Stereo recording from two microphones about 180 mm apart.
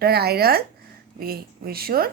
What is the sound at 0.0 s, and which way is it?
A woman's voice, 60° right (ahead or behind).